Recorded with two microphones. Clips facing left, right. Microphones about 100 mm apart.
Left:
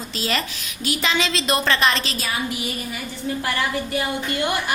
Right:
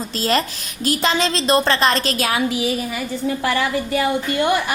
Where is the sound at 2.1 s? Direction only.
65° right (ahead or behind).